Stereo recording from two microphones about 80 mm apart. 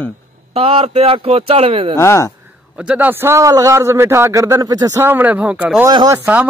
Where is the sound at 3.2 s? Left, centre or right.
Right.